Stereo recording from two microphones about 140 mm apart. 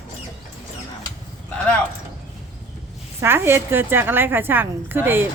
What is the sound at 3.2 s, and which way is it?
A woman's voice, 15° right (ahead or behind).